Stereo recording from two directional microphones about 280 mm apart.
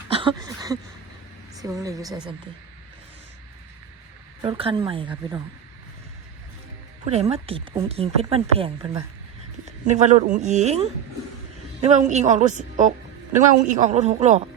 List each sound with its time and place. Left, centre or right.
0.1 s a sound: centre
1.5 s speech: centre
4.4 s speech: centre
7.0 s speech: right
9.8 s speech: right
11.9 s speech: right